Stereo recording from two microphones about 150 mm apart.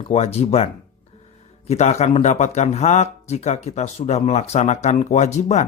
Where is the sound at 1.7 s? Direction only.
50° left (ahead or behind).